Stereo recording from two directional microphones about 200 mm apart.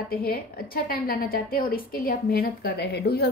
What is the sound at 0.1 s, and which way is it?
A woman's voice, 50° left (ahead or behind).